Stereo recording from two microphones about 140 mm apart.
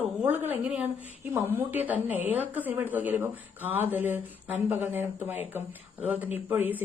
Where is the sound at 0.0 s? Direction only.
10° right (ahead or behind).